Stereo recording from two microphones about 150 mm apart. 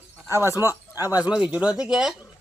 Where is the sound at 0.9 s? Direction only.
25° left (ahead or behind).